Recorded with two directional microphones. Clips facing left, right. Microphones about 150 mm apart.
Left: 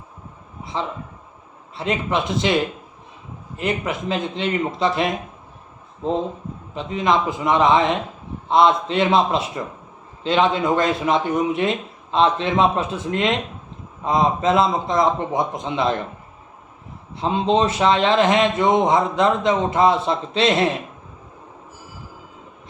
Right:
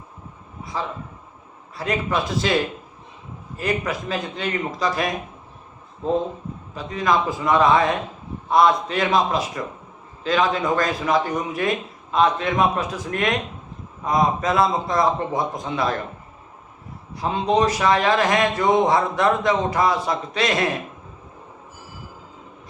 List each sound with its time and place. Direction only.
0.6 s a sound: 25° left (ahead or behind)
1.7 s a man's voice: 25° left (ahead or behind)
3.6 s a man's voice: 25° left (ahead or behind)
6.7 s a man's voice: 25° left (ahead or behind)
17.2 s a man's voice: 25° left (ahead or behind)